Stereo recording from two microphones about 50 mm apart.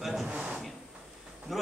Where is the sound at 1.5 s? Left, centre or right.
Centre.